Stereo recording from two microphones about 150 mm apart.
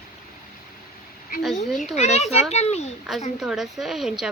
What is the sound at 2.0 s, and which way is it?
Speech, 50° left (ahead or behind).